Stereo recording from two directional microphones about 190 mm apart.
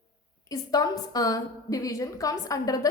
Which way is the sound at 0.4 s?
20° left (ahead or behind).